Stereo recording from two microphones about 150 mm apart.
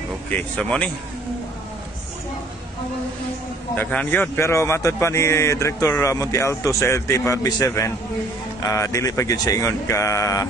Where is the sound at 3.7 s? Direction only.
10° left (ahead or behind).